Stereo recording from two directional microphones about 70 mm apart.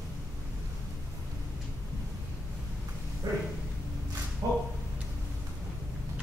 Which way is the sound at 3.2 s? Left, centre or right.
Right.